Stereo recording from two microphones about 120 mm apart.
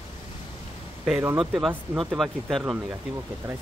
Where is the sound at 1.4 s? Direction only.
Centre (ahead or behind).